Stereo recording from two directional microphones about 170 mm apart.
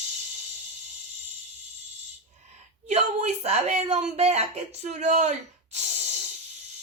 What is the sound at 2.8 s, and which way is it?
Speech, 40° right (ahead or behind).